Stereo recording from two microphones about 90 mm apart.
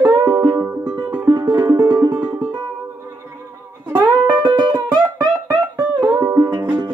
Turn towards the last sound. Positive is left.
turn(degrees=-55)  # may be behind; listen again after turning